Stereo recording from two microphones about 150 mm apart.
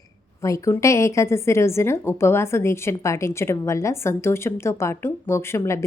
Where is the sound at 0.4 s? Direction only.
20° left (ahead or behind).